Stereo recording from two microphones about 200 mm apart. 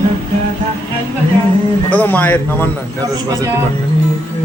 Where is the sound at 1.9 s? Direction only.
5° left (ahead or behind).